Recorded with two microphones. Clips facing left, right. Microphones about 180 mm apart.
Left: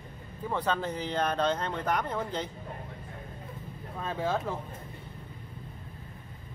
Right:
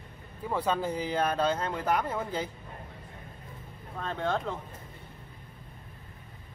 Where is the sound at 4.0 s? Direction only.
5° left (ahead or behind).